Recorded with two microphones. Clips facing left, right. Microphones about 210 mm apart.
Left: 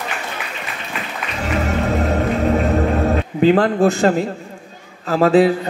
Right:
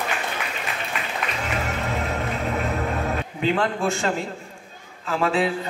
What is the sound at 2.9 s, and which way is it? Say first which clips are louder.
A man's voice: left 8 dB; 35° left (ahead or behind).